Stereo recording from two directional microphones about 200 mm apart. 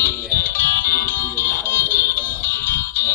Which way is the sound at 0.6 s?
45° left (ahead or behind).